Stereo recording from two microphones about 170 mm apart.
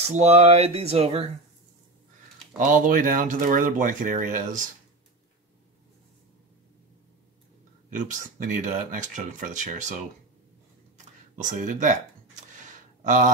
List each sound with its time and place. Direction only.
0.0 s speech: 40° right (ahead or behind)
2.6 s speech: 50° right (ahead or behind)
8.1 s speech: 50° right (ahead or behind)
11.3 s speech: 45° right (ahead or behind)
13.0 s speech: 45° right (ahead or behind)